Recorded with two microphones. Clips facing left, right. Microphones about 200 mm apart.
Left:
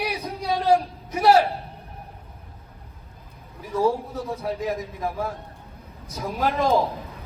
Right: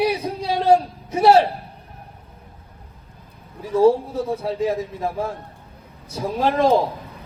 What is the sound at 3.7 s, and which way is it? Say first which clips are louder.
A man's voice: right 7 dB; 30° right (ahead or behind).